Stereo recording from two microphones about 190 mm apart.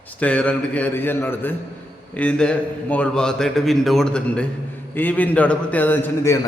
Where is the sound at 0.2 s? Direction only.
5° left (ahead or behind).